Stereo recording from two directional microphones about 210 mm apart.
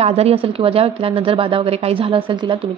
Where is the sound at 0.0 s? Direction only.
30° right (ahead or behind).